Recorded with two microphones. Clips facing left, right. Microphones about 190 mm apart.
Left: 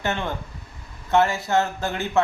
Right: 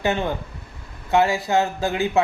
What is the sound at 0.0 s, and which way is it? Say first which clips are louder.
Speech: right 4 dB; 15° right (ahead or behind).